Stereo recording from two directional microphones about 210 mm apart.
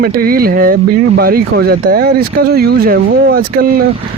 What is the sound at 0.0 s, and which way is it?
Speech, 45° right (ahead or behind).